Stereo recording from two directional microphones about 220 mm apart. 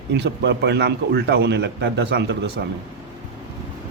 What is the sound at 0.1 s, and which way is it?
Speech, 50° right (ahead or behind).